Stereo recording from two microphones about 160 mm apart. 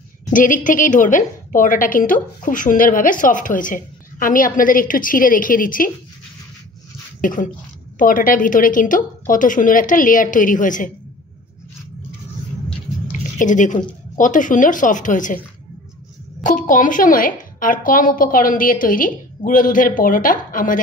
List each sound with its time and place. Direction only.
0.3 s a woman's voice: 55° left (ahead or behind)
7.2 s a woman's voice: 60° left (ahead or behind)
13.4 s a woman's voice: 50° left (ahead or behind)
16.4 s a woman's voice: 55° left (ahead or behind)